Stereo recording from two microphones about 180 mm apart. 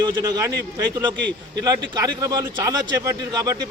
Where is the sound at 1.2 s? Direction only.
70° right (ahead or behind).